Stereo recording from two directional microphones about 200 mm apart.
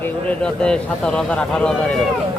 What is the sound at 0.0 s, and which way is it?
Speech, 5° left (ahead or behind).